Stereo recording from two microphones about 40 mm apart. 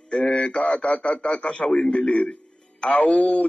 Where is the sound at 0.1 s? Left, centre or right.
Left.